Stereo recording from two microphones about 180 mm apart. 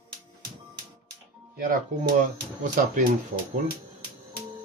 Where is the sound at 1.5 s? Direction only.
50° right (ahead or behind).